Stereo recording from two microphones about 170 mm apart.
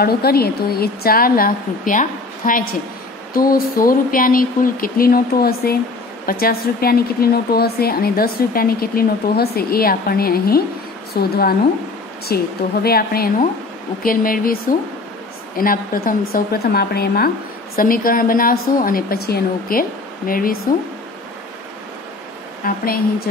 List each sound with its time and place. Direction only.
0.0 s a woman's voice: 65° left (ahead or behind)
22.6 s a woman's voice: 55° left (ahead or behind)